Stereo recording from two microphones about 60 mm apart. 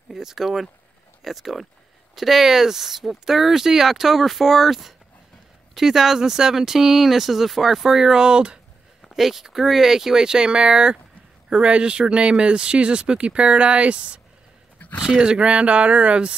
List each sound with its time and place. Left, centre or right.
0.1 s speech: centre